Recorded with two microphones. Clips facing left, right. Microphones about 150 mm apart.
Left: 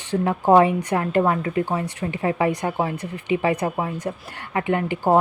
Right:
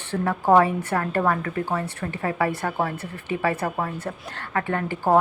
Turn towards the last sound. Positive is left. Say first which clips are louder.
# left 3 dB
turn(degrees=15)  # may be behind; listen again after turning